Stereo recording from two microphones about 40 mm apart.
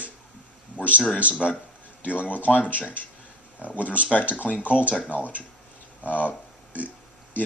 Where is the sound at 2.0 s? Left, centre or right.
Left.